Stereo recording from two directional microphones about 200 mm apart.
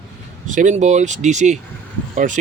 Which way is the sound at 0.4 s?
40° right (ahead or behind).